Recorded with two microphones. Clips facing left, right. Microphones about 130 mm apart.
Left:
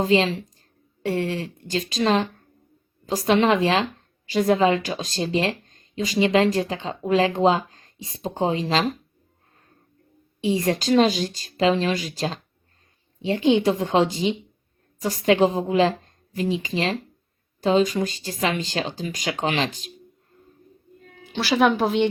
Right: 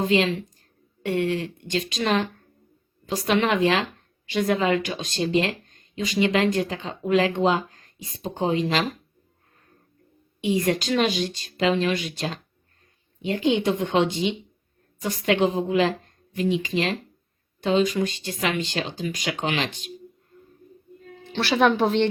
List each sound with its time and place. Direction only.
0.0 s speech: 35° left (ahead or behind)
10.4 s speech: 30° left (ahead or behind)
21.2 s speech: 5° left (ahead or behind)